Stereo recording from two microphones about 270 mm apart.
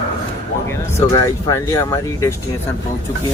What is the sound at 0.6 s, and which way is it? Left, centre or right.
Speech, centre.